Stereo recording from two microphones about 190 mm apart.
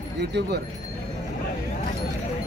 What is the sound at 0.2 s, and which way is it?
Speech, 60° right (ahead or behind).